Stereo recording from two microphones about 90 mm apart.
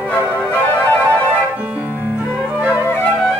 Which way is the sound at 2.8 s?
20° left (ahead or behind).